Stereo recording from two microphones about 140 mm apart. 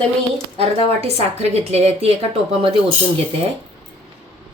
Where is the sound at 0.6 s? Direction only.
45° right (ahead or behind).